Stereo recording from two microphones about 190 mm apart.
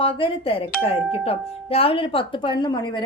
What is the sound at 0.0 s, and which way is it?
A woman's voice, 30° left (ahead or behind).